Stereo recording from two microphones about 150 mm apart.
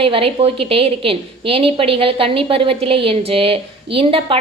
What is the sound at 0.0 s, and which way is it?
A woman's voice, 40° right (ahead or behind).